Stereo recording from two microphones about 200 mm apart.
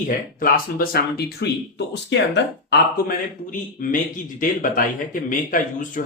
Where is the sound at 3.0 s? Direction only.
40° left (ahead or behind).